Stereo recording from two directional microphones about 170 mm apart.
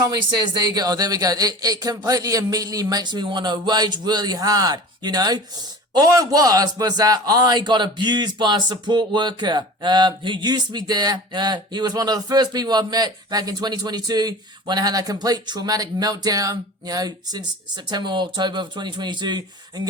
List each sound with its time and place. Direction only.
0.1 s a man's voice: 25° right (ahead or behind)